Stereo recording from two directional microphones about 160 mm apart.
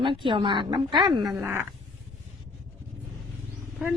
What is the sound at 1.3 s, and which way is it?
Speech, 15° right (ahead or behind).